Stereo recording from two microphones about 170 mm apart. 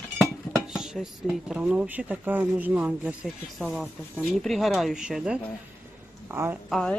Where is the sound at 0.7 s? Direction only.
5° right (ahead or behind).